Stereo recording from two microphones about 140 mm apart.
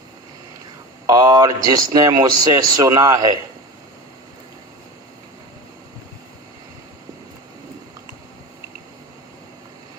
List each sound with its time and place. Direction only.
1.0 s speech: 25° right (ahead or behind)